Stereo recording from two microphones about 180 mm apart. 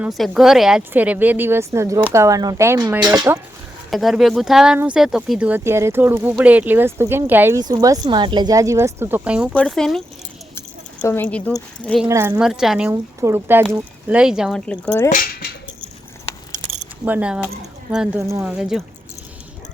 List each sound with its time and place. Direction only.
0.0 s speech: centre (ahead or behind); by 3.4 s 20° right (ahead or behind)
3.8 s a woman's voice: centre (ahead or behind)
11.0 s speech: 10° left (ahead or behind)
12.0 s a woman's voice: 15° right (ahead or behind)
12.9 s speech: 15° right (ahead or behind)
15.1 s a sound: 55° left (ahead or behind)
17.1 s a woman's voice: 5° right (ahead or behind)